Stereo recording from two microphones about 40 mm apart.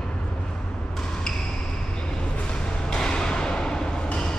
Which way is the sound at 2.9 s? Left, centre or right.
Centre.